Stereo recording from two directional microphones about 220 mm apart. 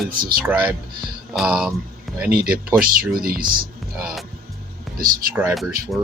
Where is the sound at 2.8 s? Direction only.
40° right (ahead or behind).